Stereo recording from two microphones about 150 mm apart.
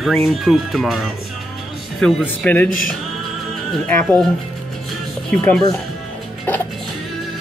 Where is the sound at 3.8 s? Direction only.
5° left (ahead or behind).